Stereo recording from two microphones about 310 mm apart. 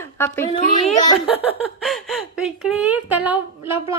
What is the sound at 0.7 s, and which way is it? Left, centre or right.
Speech, centre.